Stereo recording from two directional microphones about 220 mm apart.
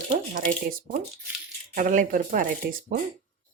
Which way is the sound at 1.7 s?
35° right (ahead or behind).